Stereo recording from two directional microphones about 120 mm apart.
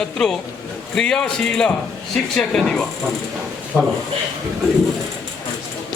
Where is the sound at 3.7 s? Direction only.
15° right (ahead or behind).